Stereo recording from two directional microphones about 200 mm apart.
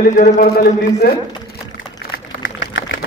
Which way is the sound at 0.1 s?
40° left (ahead or behind).